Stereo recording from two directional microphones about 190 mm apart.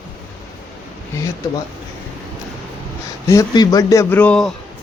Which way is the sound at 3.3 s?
20° left (ahead or behind).